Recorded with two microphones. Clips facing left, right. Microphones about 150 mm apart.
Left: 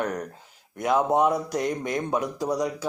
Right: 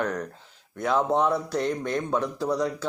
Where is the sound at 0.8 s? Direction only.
15° left (ahead or behind).